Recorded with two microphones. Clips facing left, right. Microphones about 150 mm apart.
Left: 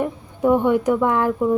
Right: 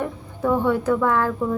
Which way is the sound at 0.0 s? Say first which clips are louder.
Left 4 dB; 15° left (ahead or behind).